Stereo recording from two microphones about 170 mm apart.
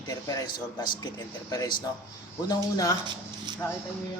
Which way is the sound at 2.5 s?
20° left (ahead or behind).